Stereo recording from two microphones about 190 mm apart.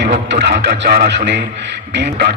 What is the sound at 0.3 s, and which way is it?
Speech, 60° right (ahead or behind).